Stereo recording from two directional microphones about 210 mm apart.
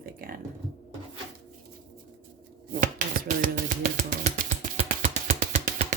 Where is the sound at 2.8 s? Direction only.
40° right (ahead or behind).